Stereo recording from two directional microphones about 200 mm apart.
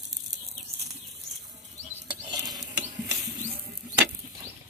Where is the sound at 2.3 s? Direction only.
20° right (ahead or behind).